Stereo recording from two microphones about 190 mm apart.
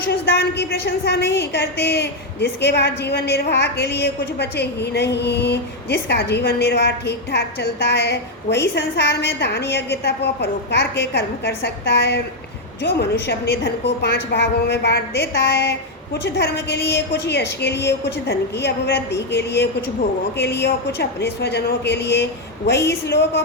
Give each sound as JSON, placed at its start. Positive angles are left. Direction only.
{"t": 0.1, "sound": "a woman's voice", "side_deg": 60}